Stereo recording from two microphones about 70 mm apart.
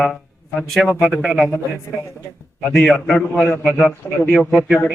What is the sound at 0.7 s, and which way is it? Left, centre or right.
Speech, centre.